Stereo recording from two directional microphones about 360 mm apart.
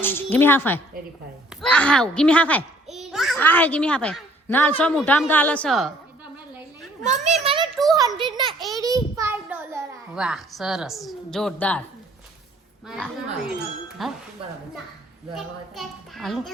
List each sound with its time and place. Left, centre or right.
0.0 s a child's voice: centre
7.0 s a child's voice: centre
7.4 s a sound: centre
7.9 s a child's voice: centre
8.5 s a child's voice: centre
14.0 s a child's voice: centre
15.4 s a child's voice: centre